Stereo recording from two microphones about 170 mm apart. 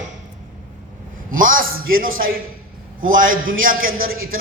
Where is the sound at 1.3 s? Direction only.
55° right (ahead or behind).